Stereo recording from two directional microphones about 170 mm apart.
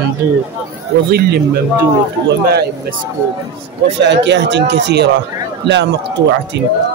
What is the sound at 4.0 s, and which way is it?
Speech, 90° right.